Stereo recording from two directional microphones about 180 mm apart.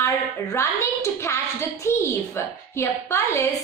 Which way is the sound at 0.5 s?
15° left (ahead or behind).